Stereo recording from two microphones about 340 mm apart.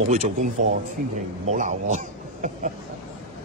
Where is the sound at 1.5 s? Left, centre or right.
Right.